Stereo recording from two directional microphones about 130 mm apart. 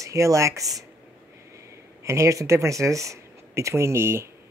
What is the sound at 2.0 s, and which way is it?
Speech, 25° right (ahead or behind).